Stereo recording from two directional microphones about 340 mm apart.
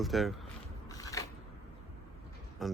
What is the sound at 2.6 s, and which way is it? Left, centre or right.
Speech, centre.